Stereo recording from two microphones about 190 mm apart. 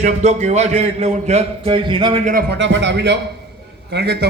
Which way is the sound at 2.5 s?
70° right (ahead or behind).